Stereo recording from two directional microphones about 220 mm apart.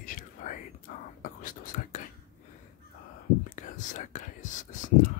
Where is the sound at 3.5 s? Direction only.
35° left (ahead or behind).